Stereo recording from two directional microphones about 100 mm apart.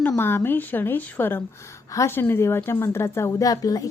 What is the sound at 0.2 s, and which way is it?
A woman's voice, 20° left (ahead or behind).